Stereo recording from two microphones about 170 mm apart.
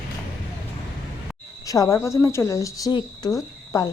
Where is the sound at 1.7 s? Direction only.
20° left (ahead or behind).